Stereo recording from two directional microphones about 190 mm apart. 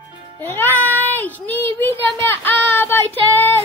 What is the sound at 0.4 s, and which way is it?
Child singing, 10° left (ahead or behind).